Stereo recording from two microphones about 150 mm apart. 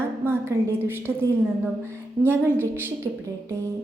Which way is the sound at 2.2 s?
15° right (ahead or behind).